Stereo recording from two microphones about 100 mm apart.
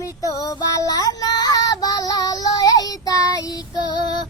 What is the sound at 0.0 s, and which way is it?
Child singing, 35° left (ahead or behind).